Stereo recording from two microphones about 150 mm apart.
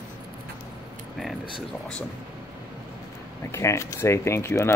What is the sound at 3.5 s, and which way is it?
Speech, 20° left (ahead or behind).